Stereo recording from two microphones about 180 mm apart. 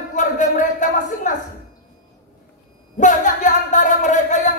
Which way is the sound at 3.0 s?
45° left (ahead or behind).